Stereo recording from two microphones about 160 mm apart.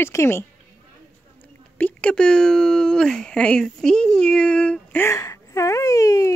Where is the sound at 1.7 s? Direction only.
10° left (ahead or behind).